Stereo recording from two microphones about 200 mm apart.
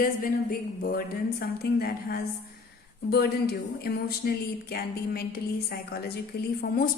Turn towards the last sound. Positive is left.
turn(degrees=45)  # may be behind; listen again after turning